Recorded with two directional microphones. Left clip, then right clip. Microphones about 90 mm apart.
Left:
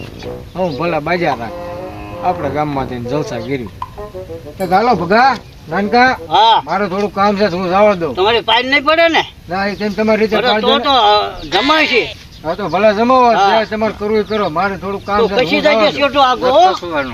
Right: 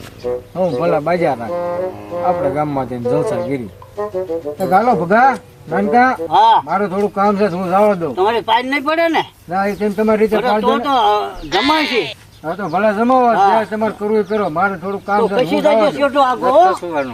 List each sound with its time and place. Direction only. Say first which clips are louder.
0.6 s speech: right 1 dB; 35° right (ahead or behind)
4.7 s speech: left 1 dB; 40° right (ahead or behind)
6.3 s a man's voice: even; 30° right (ahead or behind)
6.7 s speech: left 1 dB; 45° right (ahead or behind)
8.1 s a man's voice: left 2 dB; 25° right (ahead or behind)
9.5 s speech: even; 40° right (ahead or behind)
10.3 s a man's voice: left 2 dB; 25° right (ahead or behind)
11.5 s speech: left 3 dB; centre (ahead or behind)
12.5 s a man's voice: left 3 dB; 20° right (ahead or behind)
16.7 s speech: left 1 dB; 5° right (ahead or behind)